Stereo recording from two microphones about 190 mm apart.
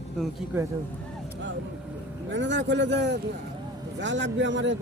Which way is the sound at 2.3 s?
70° right (ahead or behind).